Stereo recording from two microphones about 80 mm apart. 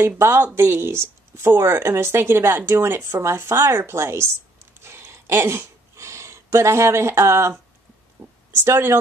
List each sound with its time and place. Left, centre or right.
0.2 s speech: right
4.8 s a sound: right
8.2 s speech: right